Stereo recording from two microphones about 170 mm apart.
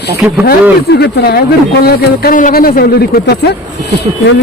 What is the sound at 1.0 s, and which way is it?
Speech, 65° left (ahead or behind).